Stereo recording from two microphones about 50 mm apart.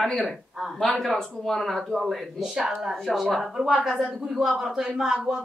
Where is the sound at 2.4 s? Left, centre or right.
Centre.